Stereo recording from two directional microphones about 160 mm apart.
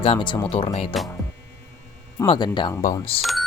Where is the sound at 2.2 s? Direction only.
30° left (ahead or behind).